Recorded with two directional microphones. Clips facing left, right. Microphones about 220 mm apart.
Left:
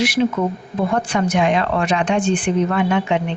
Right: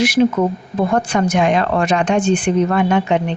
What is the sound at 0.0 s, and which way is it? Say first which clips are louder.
A woman's voice: right 4 dB; 45° right (ahead or behind).